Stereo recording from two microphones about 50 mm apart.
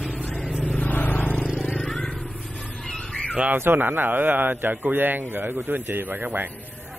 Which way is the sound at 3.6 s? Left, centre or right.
Right.